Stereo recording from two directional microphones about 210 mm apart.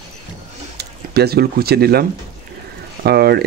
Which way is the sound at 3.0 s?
50° right (ahead or behind).